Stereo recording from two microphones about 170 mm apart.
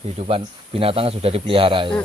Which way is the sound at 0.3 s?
35° right (ahead or behind).